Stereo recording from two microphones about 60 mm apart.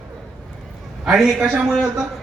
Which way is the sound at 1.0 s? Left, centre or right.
Centre.